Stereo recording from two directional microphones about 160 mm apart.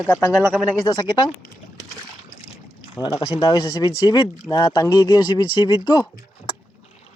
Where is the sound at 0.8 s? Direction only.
30° left (ahead or behind).